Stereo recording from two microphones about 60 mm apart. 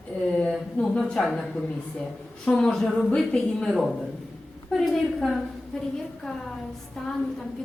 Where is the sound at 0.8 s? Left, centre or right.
Left.